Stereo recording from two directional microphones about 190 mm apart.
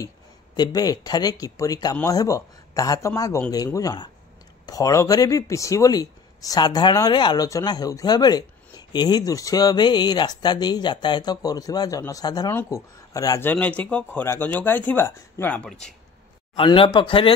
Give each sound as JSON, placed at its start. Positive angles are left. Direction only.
{"t": 0.6, "sound": "speech", "side_deg": 20}
{"t": 16.5, "sound": "speech", "side_deg": 30}